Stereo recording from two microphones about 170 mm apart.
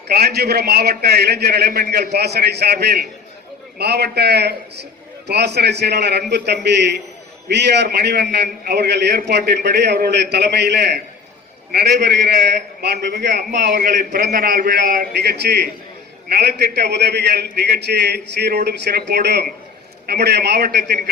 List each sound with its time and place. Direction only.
0.1 s a man's voice: 70° right (ahead or behind)
13.7 s a man's voice: 50° right (ahead or behind); by 20.9 s 70° right (ahead or behind)